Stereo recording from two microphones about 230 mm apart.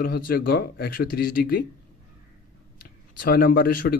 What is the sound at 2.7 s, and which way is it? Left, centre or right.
Speech, left.